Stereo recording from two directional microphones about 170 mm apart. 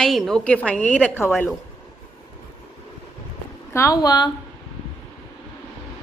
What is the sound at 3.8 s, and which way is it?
Speech, 20° left (ahead or behind).